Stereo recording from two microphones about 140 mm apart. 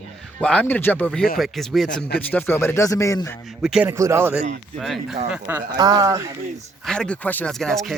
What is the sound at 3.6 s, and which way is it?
Speech, 5° right (ahead or behind).